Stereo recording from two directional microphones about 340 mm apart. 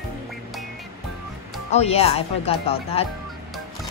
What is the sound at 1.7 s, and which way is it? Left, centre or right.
Speech, centre.